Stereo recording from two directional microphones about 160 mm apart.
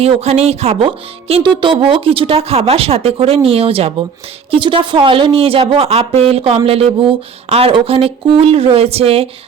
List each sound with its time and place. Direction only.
0.0 s speech: 40° right (ahead or behind)